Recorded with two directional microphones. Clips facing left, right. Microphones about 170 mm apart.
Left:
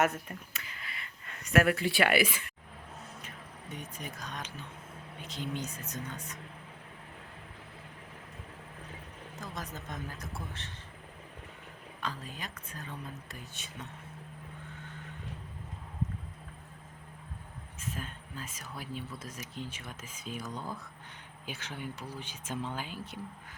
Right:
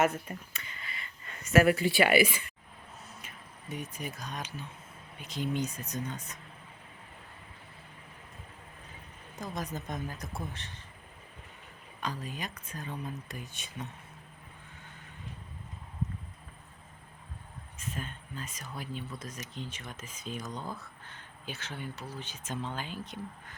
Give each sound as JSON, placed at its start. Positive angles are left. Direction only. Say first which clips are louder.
{"t": 0.0, "sound": "speech", "louder": "right 1 dB", "side_deg": 0}
{"t": 3.2, "sound": "a sound", "louder": "left 3 dB", "side_deg": -10}
{"t": 5.2, "sound": "speech", "louder": "right 5 dB", "side_deg": -10}
{"t": 9.4, "sound": "speech", "louder": "right 5 dB", "side_deg": -15}
{"t": 11.9, "sound": "speech", "louder": "right 3 dB", "side_deg": -15}
{"t": 17.7, "sound": "speech", "louder": "right 1 dB", "side_deg": 5}